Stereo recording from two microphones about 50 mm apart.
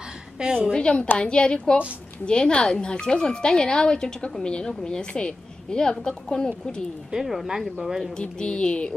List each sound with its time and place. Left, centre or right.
0.4 s a woman's voice: centre
0.7 s speech: centre
7.1 s speech: centre
8.2 s speech: left